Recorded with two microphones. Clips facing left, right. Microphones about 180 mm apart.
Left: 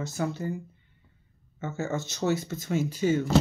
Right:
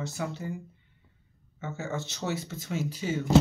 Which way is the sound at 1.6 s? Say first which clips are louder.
Left 3 dB; 45° left (ahead or behind).